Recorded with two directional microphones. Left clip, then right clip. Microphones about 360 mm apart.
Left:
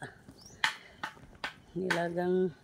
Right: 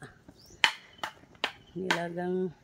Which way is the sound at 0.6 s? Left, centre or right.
Right.